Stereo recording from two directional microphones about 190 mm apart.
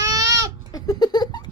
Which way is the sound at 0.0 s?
20° right (ahead or behind).